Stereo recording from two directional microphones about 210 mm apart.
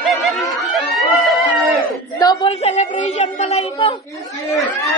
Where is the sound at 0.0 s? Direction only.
Centre (ahead or behind).